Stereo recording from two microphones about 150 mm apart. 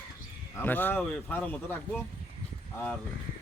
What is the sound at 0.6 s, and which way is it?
Speech, 15° left (ahead or behind).